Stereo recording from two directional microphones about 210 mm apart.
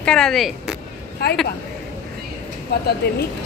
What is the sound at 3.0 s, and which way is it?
Speech, 50° left (ahead or behind).